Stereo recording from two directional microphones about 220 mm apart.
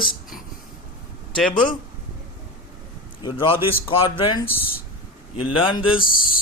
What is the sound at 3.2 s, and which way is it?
Speech, 20° left (ahead or behind).